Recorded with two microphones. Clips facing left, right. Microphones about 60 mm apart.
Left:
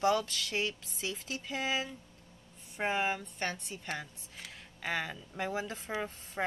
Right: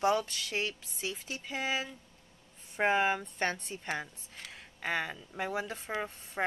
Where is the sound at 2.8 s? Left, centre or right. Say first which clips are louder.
Right 4 dB; right.